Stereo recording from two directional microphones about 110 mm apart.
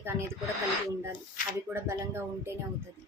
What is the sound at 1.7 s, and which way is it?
Speech, 25° right (ahead or behind).